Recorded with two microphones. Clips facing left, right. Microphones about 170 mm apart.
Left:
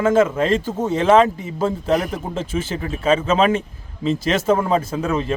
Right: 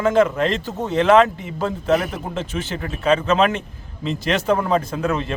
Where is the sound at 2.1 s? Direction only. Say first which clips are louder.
Left 2 dB; 5° left (ahead or behind).